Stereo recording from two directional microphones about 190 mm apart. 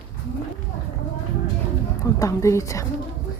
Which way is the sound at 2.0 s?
15° left (ahead or behind).